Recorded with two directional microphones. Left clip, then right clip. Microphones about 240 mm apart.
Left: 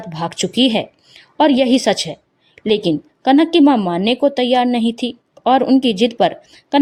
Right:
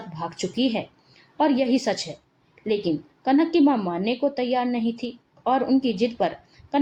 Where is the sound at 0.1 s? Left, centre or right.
Left.